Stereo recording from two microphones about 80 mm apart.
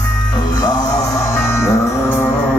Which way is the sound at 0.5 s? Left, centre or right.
Left.